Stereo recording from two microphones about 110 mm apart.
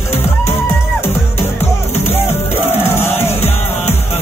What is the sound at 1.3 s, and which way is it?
Music, 70° left (ahead or behind).